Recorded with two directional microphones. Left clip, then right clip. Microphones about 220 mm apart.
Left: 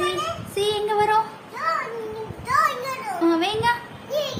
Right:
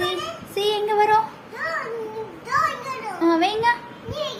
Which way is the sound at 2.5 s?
15° left (ahead or behind).